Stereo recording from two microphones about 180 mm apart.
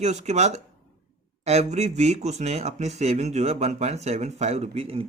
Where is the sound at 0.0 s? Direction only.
40° right (ahead or behind).